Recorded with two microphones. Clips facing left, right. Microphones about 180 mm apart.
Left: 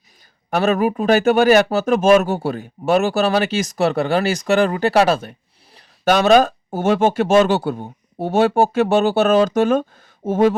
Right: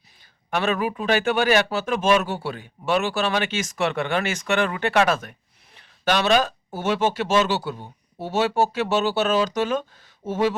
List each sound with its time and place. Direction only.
0.5 s speech: 40° left (ahead or behind)
5.7 s speech: 45° left (ahead or behind)